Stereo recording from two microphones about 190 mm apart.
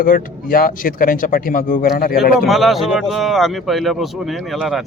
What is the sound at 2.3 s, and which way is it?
Speech, centre (ahead or behind).